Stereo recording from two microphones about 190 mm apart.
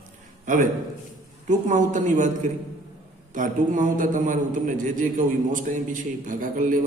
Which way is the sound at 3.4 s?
45° right (ahead or behind).